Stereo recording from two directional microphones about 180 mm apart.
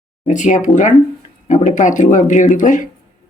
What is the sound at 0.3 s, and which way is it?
Speech, 45° left (ahead or behind).